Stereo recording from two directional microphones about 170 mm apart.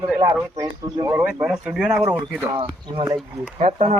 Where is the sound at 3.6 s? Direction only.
40° right (ahead or behind).